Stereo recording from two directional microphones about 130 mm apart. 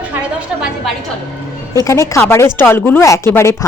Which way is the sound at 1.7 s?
25° left (ahead or behind).